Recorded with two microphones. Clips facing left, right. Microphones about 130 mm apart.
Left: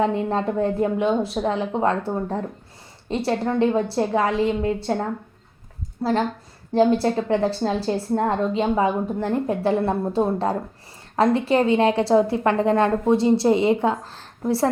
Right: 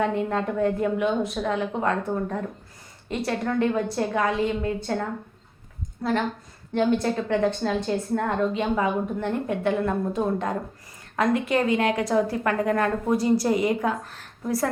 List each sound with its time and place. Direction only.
0.0 s a woman's voice: 30° left (ahead or behind)